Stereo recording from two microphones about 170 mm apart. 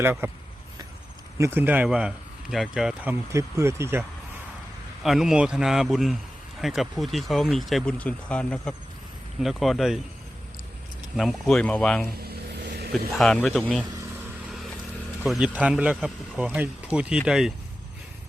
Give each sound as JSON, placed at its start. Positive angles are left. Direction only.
{"t": 0.0, "sound": "speech", "side_deg": -10}
{"t": 1.4, "sound": "speech", "side_deg": -10}
{"t": 5.0, "sound": "speech", "side_deg": -5}
{"t": 11.2, "sound": "speech", "side_deg": 0}
{"t": 12.3, "sound": "vehicle", "side_deg": -70}
{"t": 13.1, "sound": "speech", "side_deg": 5}
{"t": 15.3, "sound": "speech", "side_deg": -5}